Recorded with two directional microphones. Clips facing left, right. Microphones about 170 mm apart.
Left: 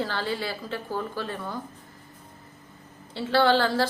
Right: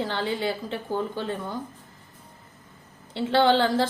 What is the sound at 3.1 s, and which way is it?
Speech, 20° right (ahead or behind).